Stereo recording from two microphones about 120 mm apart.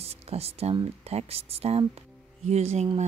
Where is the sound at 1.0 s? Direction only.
60° right (ahead or behind).